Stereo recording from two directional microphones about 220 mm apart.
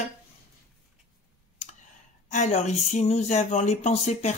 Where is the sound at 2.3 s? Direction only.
30° left (ahead or behind).